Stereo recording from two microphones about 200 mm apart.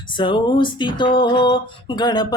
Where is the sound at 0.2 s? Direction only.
25° left (ahead or behind).